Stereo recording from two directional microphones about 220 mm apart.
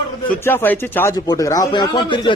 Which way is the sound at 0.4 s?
10° left (ahead or behind).